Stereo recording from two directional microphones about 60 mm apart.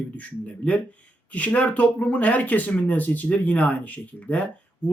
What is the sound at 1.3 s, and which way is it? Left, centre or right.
A man's voice, left.